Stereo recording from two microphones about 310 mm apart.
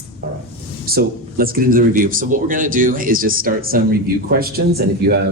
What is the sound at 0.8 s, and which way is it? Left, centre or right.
Speech, right.